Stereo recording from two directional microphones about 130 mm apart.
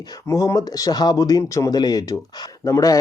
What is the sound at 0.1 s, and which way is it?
Speech, 25° left (ahead or behind).